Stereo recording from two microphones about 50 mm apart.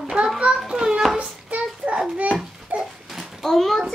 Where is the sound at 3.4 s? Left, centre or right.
Centre.